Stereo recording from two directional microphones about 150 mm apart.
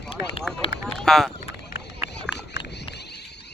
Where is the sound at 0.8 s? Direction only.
Centre (ahead or behind).